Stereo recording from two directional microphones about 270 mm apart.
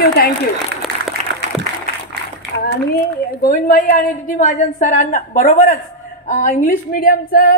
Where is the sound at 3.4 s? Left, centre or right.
Left.